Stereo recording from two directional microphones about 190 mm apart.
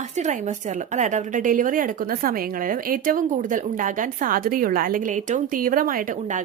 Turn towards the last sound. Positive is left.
turn(degrees=-40)  # may be behind; listen again after turning